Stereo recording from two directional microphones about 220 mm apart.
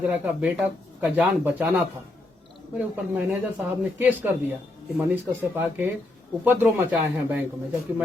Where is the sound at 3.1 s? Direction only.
5° right (ahead or behind).